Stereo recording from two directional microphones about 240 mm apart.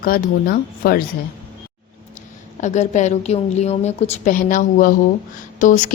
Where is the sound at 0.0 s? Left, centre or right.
Left.